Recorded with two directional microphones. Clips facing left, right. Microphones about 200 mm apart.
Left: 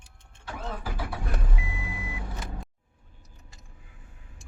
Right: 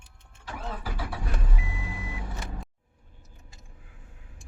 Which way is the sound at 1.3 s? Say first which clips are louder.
Left 1 dB; 20° left (ahead or behind).